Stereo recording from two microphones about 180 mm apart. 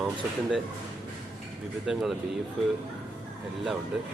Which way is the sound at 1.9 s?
5° right (ahead or behind).